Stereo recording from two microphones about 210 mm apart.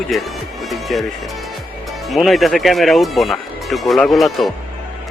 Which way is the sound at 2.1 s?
Centre (ahead or behind).